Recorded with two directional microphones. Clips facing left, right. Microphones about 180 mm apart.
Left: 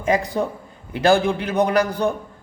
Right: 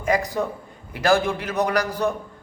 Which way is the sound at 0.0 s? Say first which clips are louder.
Left 2 dB; 25° left (ahead or behind).